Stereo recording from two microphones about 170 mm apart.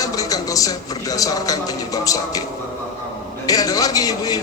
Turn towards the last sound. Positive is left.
turn(degrees=20)  # may be behind; listen again after turning